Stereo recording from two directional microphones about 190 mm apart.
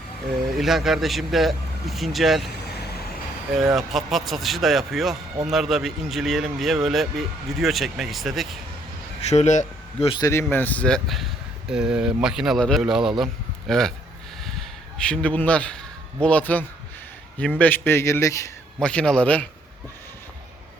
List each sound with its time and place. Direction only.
0.6 s a man's voice: centre (ahead or behind)
3.5 s a man's voice: centre (ahead or behind)
9.2 s speech: 35° left (ahead or behind)
10.1 s a man's voice: 20° left (ahead or behind); by 13.9 s centre (ahead or behind)
14.4 s a sound: 5° left (ahead or behind)
16.2 s speech: 5° left (ahead or behind)
18.8 s a man's voice: 5° left (ahead or behind)